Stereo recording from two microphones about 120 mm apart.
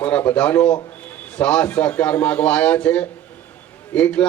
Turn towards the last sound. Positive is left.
turn(degrees=10)  # may be behind; listen again after turning